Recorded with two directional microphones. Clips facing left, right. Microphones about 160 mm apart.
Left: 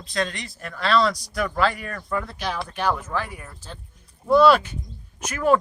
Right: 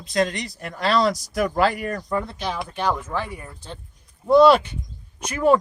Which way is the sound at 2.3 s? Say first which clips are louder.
Right 1 dB; 15° right (ahead or behind).